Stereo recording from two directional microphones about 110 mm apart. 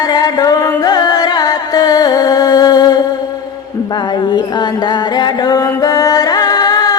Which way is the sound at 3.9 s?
40° left (ahead or behind).